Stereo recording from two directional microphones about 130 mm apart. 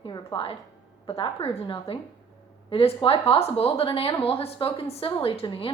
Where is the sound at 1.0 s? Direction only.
45° left (ahead or behind).